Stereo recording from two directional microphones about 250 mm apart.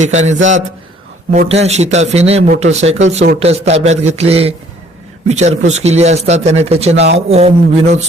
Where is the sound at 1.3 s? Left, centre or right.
Right.